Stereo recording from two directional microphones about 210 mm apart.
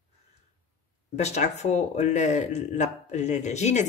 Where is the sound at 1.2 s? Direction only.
30° left (ahead or behind).